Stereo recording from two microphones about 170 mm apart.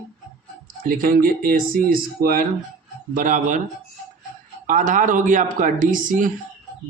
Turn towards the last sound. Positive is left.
turn(degrees=-50)  # may be behind; listen again after turning